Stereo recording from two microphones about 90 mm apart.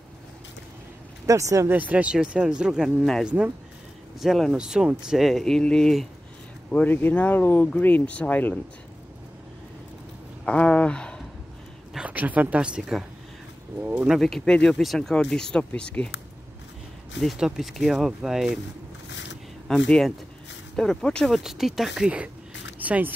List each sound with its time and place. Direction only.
1.2 s speech: 35° right (ahead or behind)
1.7 s speech: 15° right (ahead or behind)
4.2 s speech: 5° right (ahead or behind)
6.7 s speech: 20° left (ahead or behind)
10.4 s speech: 15° left (ahead or behind)
12.1 s speech: 15° right (ahead or behind)
13.7 s speech: 20° right (ahead or behind)
14.2 s speech: 5° left (ahead or behind)
17.2 s speech: centre (ahead or behind)
19.7 s speech: 5° left (ahead or behind)
21.4 s speech: 5° right (ahead or behind)